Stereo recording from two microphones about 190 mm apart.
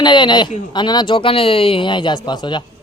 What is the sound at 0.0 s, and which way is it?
Speech, 25° left (ahead or behind).